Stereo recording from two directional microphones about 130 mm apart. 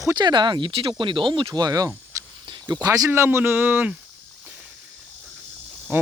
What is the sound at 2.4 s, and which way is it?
Speech, 35° right (ahead or behind).